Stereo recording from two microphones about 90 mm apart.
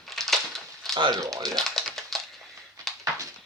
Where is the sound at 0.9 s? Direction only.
55° right (ahead or behind).